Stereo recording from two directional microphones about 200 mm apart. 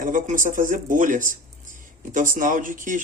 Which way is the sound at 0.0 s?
40° right (ahead or behind).